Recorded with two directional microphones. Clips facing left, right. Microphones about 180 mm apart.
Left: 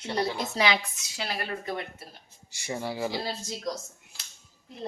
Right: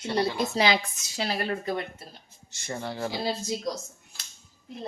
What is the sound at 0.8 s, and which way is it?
Speech, 45° right (ahead or behind).